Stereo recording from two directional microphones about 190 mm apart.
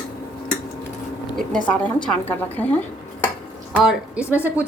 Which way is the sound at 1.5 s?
5° left (ahead or behind).